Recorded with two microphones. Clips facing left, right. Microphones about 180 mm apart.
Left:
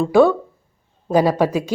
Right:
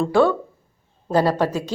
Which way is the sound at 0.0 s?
10° left (ahead or behind).